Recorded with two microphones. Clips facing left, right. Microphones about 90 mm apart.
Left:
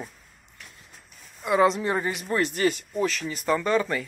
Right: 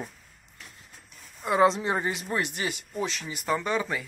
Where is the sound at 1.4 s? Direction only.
30° right (ahead or behind); by 4.1 s 10° right (ahead or behind).